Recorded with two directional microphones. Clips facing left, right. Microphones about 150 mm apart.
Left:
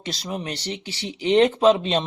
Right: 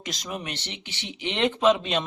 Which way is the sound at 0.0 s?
30° left (ahead or behind).